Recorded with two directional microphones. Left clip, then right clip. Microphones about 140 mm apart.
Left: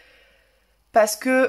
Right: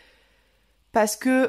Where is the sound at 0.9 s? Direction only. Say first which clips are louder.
Left 3 dB; 35° right (ahead or behind).